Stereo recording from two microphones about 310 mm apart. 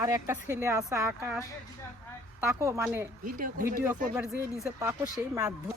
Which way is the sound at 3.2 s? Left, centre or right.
Right.